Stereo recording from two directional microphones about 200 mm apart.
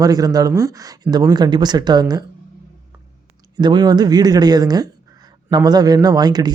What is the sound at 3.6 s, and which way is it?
Speech, 20° right (ahead or behind).